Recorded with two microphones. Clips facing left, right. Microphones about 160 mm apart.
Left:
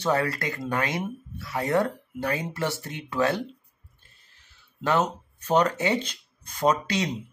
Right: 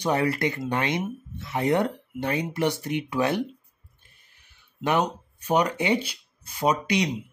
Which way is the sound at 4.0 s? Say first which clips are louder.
Even; 15° right (ahead or behind).